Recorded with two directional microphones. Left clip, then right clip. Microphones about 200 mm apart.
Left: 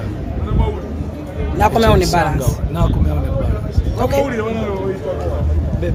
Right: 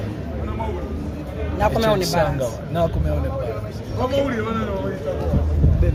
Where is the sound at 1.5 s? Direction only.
50° left (ahead or behind).